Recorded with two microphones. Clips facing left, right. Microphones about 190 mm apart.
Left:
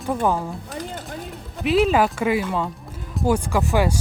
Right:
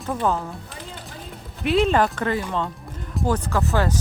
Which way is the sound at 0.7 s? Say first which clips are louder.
Left 7 dB; 45° left (ahead or behind).